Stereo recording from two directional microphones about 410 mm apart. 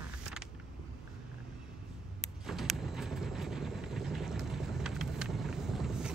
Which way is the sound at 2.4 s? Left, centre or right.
Centre.